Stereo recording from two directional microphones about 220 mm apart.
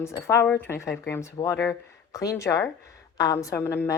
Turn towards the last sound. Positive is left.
turn(degrees=10)  # may be behind; listen again after turning